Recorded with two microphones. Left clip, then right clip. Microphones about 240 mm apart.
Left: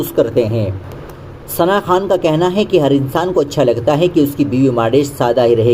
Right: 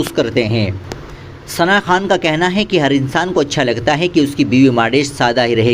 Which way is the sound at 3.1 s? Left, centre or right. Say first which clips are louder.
Even; right.